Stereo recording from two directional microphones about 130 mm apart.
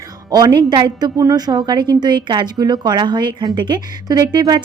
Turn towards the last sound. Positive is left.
turn(degrees=-35)  # may be behind; listen again after turning